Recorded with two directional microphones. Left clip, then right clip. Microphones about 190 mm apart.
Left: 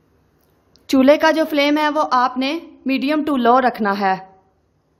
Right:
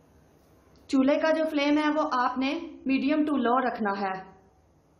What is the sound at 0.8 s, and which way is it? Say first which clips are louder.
A woman's voice: left 11 dB; 55° left (ahead or behind).